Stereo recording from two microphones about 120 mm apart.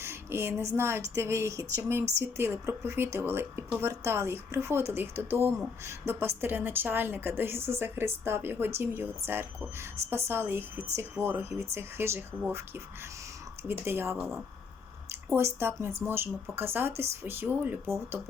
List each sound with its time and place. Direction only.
0.0 s speech: 20° right (ahead or behind)
15.1 s a sound: 20° right (ahead or behind)
15.5 s speech: 20° right (ahead or behind)